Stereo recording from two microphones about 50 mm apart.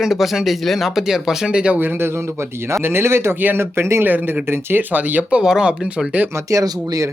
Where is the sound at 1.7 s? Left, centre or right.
Right.